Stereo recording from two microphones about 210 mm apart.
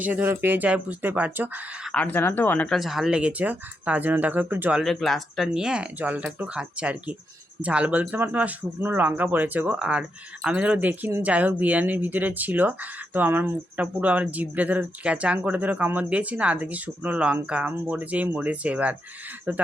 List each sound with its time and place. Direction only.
0.0 s speech: 10° right (ahead or behind)
1.9 s speech: 5° left (ahead or behind); by 19.6 s 10° right (ahead or behind)